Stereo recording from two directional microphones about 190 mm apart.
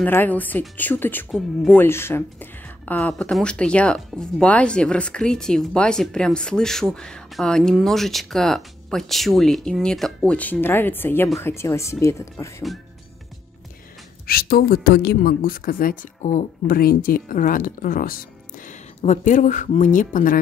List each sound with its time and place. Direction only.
0.0 s speech: 10° left (ahead or behind)
14.2 s speech: 50° left (ahead or behind)